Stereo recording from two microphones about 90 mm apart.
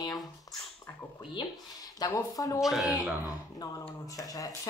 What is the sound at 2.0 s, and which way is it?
Speech, 40° left (ahead or behind).